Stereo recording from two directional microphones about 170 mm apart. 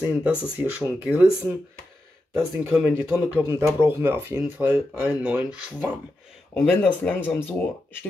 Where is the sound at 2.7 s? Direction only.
10° right (ahead or behind).